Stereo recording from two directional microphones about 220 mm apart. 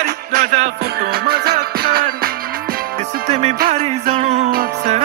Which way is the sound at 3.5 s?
40° right (ahead or behind).